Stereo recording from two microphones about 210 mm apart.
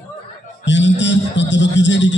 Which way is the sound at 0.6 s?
60° left (ahead or behind).